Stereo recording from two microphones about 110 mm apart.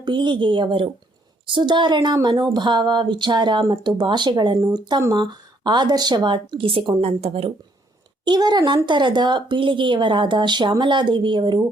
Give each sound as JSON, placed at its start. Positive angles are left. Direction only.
{"t": 0.0, "sound": "speech", "side_deg": -45}
{"t": 7.0, "sound": "speech", "side_deg": -65}
{"t": 8.2, "sound": "speech", "side_deg": -40}